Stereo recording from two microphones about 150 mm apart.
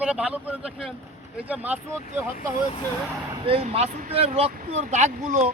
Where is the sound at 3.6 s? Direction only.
45° right (ahead or behind).